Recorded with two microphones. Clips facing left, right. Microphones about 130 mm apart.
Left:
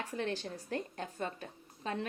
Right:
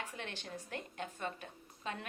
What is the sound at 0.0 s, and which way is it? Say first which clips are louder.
A woman's voice: left 8 dB; 35° left (ahead or behind).